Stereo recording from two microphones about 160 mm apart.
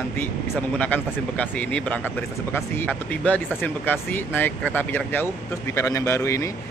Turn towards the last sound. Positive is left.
turn(degrees=20)  # may be behind; listen again after turning